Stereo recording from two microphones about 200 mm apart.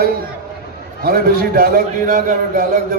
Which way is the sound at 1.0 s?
50° right (ahead or behind).